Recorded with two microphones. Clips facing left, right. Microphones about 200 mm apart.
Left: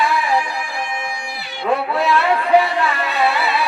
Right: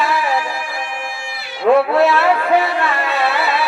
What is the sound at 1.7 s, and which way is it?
Speech, 50° right (ahead or behind).